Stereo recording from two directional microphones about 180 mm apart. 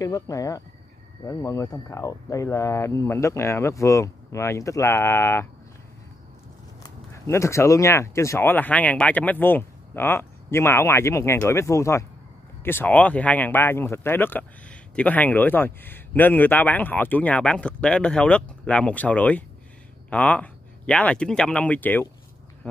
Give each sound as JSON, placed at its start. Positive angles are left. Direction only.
{"t": 0.0, "sound": "speech", "side_deg": 20}
{"t": 6.8, "sound": "speech", "side_deg": 15}